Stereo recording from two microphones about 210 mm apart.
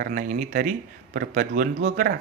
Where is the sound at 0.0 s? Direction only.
40° right (ahead or behind).